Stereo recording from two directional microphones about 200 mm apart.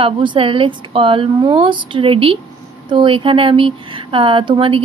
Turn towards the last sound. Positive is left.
turn(degrees=-25)  # may be behind; listen again after turning